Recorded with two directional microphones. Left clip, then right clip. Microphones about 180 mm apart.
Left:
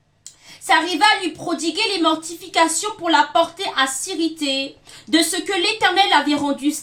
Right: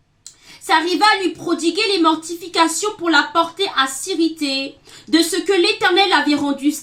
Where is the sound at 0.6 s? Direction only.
20° left (ahead or behind).